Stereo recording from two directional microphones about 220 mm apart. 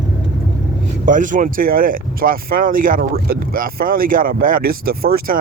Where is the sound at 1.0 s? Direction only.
35° right (ahead or behind).